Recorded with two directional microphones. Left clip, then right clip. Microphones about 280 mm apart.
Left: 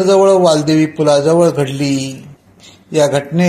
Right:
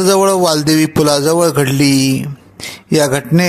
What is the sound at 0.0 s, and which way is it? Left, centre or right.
Speech, right.